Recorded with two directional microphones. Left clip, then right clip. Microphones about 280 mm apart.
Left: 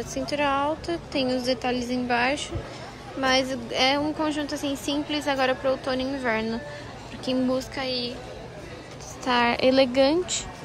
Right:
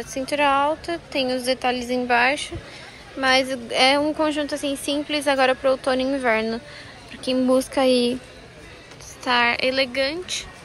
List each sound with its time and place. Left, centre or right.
0.3 s a woman's voice: centre
9.2 s a woman's voice: centre